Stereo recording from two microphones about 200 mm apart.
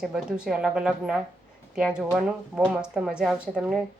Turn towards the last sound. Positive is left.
turn(degrees=0)  # may be behind; listen again after turning